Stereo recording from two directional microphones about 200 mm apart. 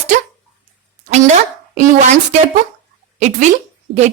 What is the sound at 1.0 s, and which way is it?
A woman's voice, 35° right (ahead or behind).